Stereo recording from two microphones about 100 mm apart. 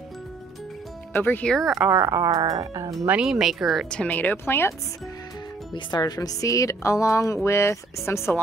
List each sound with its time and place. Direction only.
1.1 s speech: 20° left (ahead or behind)
1.4 s speech: 5° left (ahead or behind)
1.9 s speech: 25° right (ahead or behind)
3.1 s speech: 10° right (ahead or behind)
3.9 s speech: 15° left (ahead or behind)
5.7 s speech: 45° left (ahead or behind); by 8.2 s 25° left (ahead or behind)